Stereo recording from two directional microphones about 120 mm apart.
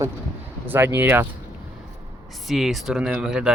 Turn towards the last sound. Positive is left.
turn(degrees=-5)  # may be behind; listen again after turning